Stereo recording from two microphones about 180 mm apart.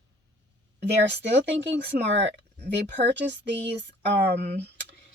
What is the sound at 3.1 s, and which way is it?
Speech, 75° right (ahead or behind).